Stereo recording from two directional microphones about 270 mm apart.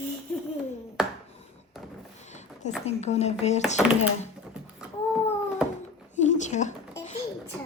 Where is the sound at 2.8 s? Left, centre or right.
Left.